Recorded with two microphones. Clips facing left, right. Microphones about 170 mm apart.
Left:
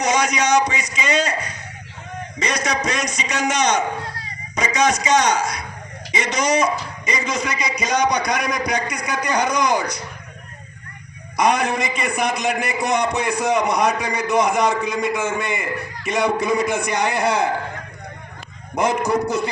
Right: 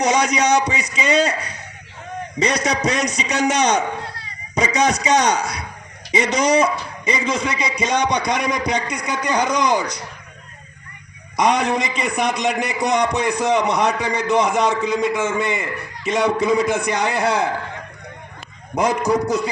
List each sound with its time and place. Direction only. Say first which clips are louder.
0.0 s a sound: right 2 dB; 35° right (ahead or behind)
0.9 s a man's voice: right 4 dB; 35° right (ahead or behind)
2.6 s a man's voice: right 3 dB; 35° right (ahead or behind)
11.3 s a man's voice: right 1 dB; 20° right (ahead or behind)
13.6 s a man's voice: even; 15° left (ahead or behind)
18.8 s a man's voice: right 1 dB; 15° right (ahead or behind)